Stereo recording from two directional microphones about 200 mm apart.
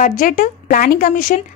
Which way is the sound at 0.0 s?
40° left (ahead or behind).